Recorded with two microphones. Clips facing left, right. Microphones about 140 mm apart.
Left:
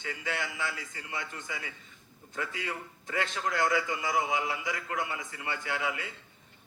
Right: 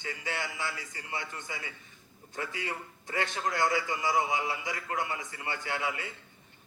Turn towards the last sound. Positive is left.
turn(degrees=-30)  # may be behind; listen again after turning